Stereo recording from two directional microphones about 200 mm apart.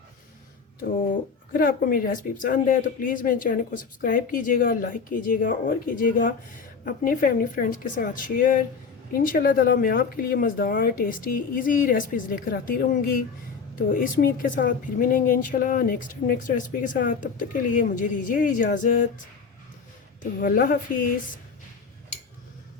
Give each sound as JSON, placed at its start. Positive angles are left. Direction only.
{"t": 1.5, "sound": "speech", "side_deg": 45}
{"t": 20.4, "sound": "speech", "side_deg": 45}